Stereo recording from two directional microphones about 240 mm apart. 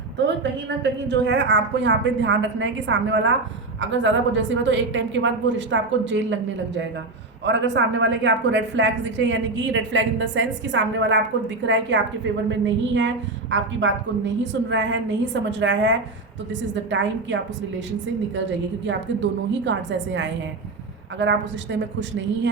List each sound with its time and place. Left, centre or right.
0.8 s a woman's voice: right
7.4 s a woman's voice: right
18.9 s a woman's voice: right